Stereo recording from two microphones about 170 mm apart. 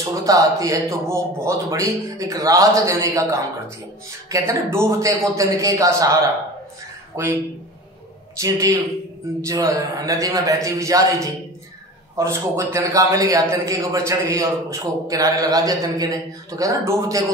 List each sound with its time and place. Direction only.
0.1 s speech: 20° right (ahead or behind)
7.2 s a man's voice: 15° right (ahead or behind)
8.4 s a man's voice: 20° right (ahead or behind)